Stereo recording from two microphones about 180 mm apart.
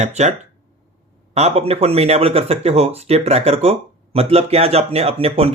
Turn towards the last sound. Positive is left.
turn(degrees=-35)  # may be behind; listen again after turning